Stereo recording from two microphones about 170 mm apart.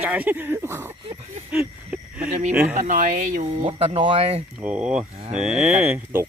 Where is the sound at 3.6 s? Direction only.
30° right (ahead or behind).